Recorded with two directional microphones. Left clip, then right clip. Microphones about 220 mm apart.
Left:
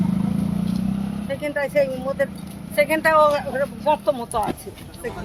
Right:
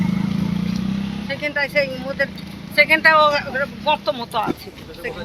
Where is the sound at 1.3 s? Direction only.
25° left (ahead or behind).